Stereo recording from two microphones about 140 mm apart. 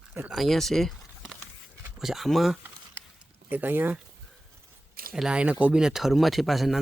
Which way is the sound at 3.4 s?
15° right (ahead or behind).